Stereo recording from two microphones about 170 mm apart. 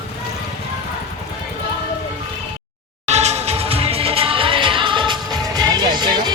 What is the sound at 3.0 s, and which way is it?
Music, 40° right (ahead or behind).